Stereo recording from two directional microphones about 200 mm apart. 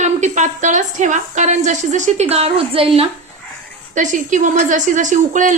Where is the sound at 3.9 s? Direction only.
40° right (ahead or behind).